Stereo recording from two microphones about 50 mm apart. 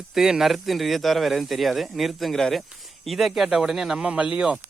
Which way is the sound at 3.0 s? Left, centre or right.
Centre.